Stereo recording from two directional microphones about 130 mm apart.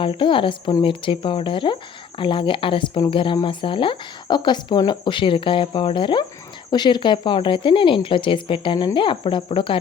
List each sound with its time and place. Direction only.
0.0 s speech: 40° left (ahead or behind)